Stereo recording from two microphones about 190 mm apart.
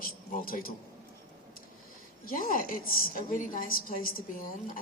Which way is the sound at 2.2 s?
45° left (ahead or behind).